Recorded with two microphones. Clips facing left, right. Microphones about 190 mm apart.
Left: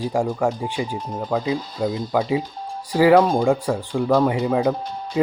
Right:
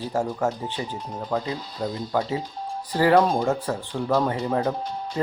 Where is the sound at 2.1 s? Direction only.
15° left (ahead or behind).